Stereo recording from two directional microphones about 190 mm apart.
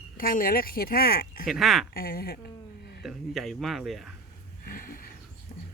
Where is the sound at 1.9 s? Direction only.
50° left (ahead or behind).